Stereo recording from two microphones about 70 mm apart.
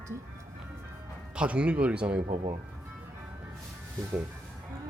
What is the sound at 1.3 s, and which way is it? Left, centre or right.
Speech, centre.